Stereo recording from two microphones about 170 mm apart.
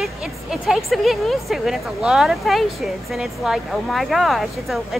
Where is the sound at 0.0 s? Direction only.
Centre (ahead or behind).